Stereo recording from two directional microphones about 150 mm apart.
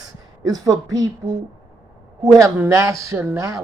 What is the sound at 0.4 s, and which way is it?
Speech, 25° right (ahead or behind).